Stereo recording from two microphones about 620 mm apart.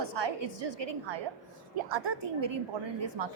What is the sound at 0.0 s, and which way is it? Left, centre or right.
Speech, right.